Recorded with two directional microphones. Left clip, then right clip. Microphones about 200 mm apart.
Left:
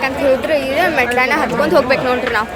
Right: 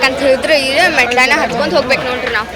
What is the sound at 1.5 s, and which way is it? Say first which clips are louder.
Speech: even; 25° left (ahead or behind).